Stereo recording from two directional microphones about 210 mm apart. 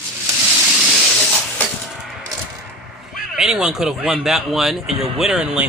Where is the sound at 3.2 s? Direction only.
Centre (ahead or behind).